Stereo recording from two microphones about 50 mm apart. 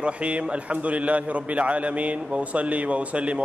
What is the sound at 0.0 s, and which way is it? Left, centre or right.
A man's voice, right.